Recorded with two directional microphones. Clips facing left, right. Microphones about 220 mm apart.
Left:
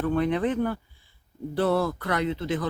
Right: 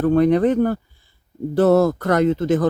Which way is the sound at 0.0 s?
40° right (ahead or behind).